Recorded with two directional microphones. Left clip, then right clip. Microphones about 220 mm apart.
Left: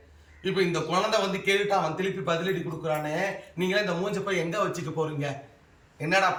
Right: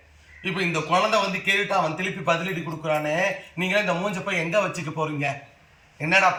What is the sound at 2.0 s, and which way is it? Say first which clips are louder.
A man's voice: right 4 dB; 5° left (ahead or behind).